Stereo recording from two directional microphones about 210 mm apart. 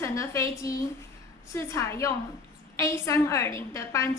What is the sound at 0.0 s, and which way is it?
A woman's voice, 15° left (ahead or behind).